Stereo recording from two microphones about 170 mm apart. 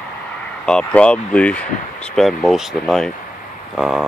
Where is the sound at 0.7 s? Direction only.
5° left (ahead or behind).